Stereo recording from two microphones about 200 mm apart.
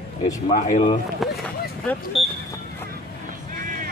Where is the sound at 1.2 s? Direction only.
Centre (ahead or behind).